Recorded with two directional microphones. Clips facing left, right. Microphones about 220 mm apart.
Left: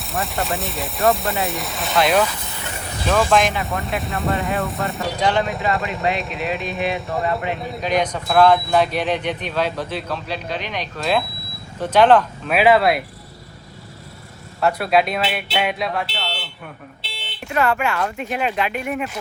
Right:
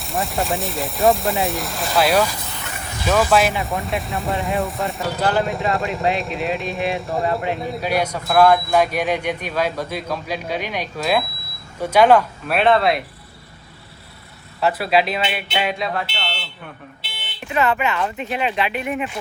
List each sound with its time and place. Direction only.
0.0 s speech: centre (ahead or behind)
12.5 s speech: centre (ahead or behind)
14.6 s speech: centre (ahead or behind)
17.0 s buzzer: 30° left (ahead or behind)
17.9 s speech: centre (ahead or behind)